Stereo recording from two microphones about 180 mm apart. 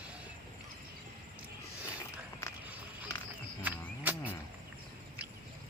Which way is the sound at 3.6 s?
10° right (ahead or behind).